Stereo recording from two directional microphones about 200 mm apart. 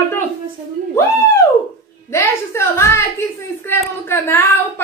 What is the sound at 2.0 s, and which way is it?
Speech, 15° left (ahead or behind).